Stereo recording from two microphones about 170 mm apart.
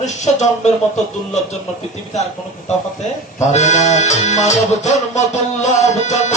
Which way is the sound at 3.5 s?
45° left (ahead or behind).